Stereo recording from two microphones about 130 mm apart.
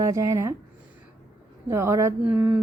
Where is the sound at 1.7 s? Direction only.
20° right (ahead or behind).